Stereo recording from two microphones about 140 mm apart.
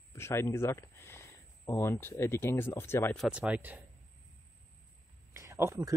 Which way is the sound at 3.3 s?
10° right (ahead or behind).